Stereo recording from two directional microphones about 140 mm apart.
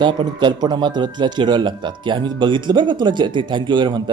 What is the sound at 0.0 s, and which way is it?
Speech, 35° right (ahead or behind).